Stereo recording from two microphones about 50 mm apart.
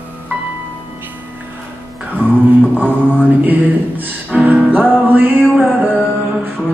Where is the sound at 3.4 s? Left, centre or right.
Right.